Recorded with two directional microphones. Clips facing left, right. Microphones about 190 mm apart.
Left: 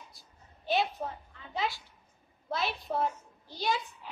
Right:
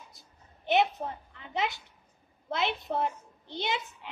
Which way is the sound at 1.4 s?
20° right (ahead or behind).